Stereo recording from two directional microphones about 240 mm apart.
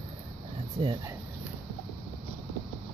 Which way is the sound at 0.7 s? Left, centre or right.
Right.